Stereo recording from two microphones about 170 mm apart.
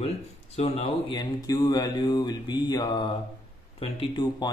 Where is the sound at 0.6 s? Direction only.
35° left (ahead or behind).